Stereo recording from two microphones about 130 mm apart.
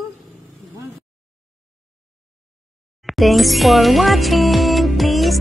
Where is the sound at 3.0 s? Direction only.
Centre (ahead or behind).